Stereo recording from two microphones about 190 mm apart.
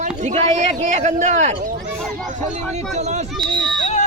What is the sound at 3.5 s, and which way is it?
Speech, 25° right (ahead or behind).